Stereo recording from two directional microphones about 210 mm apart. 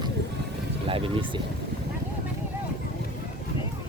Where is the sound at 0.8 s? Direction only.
25° right (ahead or behind).